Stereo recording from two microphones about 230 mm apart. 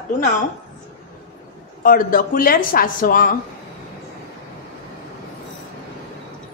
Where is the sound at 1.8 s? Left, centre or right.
Left.